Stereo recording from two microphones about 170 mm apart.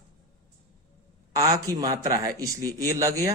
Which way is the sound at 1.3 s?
20° right (ahead or behind).